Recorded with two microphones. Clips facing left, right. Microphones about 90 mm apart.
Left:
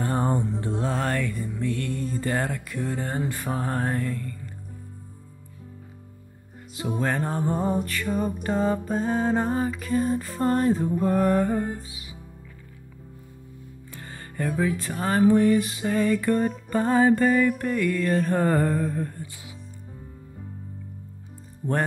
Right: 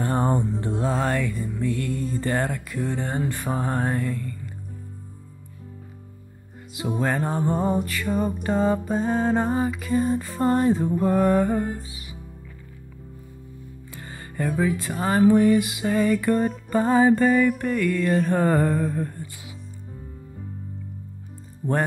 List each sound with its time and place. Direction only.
0.0 s mantra: 35° right (ahead or behind)
1.0 s music: 10° right (ahead or behind)
2.1 s music: 30° right (ahead or behind)
2.8 s music: centre (ahead or behind)
3.6 s music: 15° right (ahead or behind)
3.9 s music: 5° right (ahead or behind)
6.7 s music: 15° right (ahead or behind)
7.2 s music: 5° right (ahead or behind)
11.9 s music: 50° right (ahead or behind)
14.0 s music: 15° right (ahead or behind)
15.0 s music: 20° right (ahead or behind)
15.2 s music: 5° right (ahead or behind)